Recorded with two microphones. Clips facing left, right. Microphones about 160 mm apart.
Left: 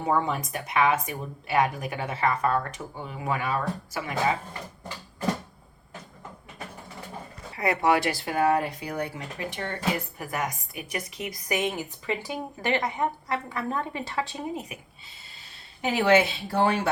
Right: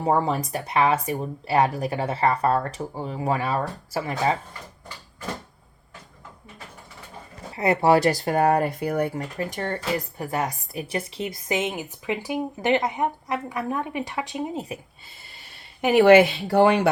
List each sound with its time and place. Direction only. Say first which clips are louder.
0.0 s speech: right 4 dB; 35° right (ahead or behind)
7.5 s speech: right 5 dB; 25° right (ahead or behind); by 9.7 s 40° right (ahead or behind)
10.2 s a woman's voice: right 4 dB; 30° right (ahead or behind)
15.8 s speech: right 7 dB; 65° right (ahead or behind)